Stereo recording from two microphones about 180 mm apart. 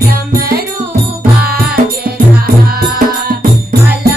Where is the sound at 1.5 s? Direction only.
55° right (ahead or behind).